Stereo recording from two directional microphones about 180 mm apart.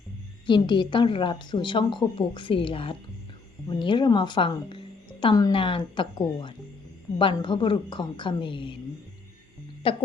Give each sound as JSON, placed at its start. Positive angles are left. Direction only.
{"t": 0.4, "sound": "speech", "side_deg": 25}
{"t": 9.8, "sound": "speech", "side_deg": 30}